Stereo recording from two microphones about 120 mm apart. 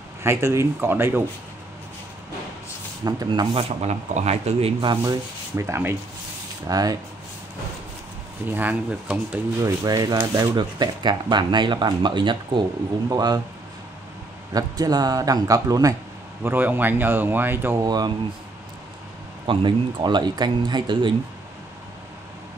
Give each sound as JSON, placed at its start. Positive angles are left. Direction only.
{"t": 0.2, "sound": "speech", "side_deg": -25}
{"t": 3.0, "sound": "rub", "side_deg": -30}
{"t": 3.3, "sound": "speech", "side_deg": -45}
{"t": 3.8, "sound": "speech", "side_deg": -65}
{"t": 4.8, "sound": "speech", "side_deg": -30}
{"t": 6.7, "sound": "speech", "side_deg": -30}
{"t": 8.5, "sound": "speech", "side_deg": -15}
{"t": 9.6, "sound": "speech", "side_deg": -30}
{"t": 14.5, "sound": "speech", "side_deg": -35}
{"t": 16.4, "sound": "speech", "side_deg": -15}
{"t": 17.8, "sound": "speech", "side_deg": -35}
{"t": 19.4, "sound": "speech", "side_deg": -45}